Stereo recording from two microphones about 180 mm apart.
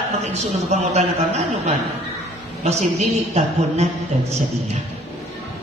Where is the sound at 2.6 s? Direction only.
35° right (ahead or behind).